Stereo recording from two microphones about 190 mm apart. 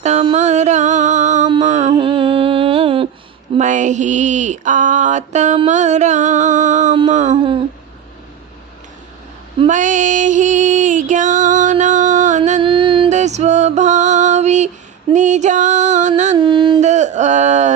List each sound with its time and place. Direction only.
0.0 s music: 35° right (ahead or behind)
1.6 s humming: 35° right (ahead or behind)
3.6 s a sound: 40° right (ahead or behind)
9.6 s female singing: 40° right (ahead or behind)
12.6 s music: 25° right (ahead or behind)
16.4 s carnatic music: 25° right (ahead or behind)
16.8 s a sound: 35° right (ahead or behind)